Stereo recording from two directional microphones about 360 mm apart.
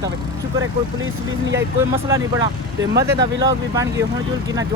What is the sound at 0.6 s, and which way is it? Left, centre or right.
Speech, right.